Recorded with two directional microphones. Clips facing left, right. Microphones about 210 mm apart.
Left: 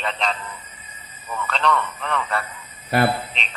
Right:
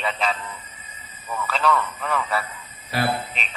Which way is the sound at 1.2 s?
5° right (ahead or behind).